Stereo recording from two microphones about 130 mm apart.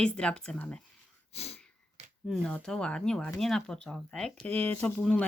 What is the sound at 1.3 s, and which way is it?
Sniff, 55° left (ahead or behind).